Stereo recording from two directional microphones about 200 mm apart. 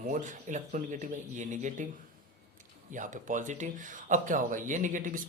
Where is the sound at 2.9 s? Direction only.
40° right (ahead or behind).